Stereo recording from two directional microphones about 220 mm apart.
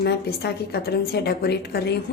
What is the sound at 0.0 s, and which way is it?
A woman's voice, 45° left (ahead or behind).